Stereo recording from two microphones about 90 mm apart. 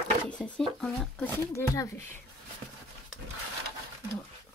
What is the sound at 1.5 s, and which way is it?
Speech, 35° left (ahead or behind).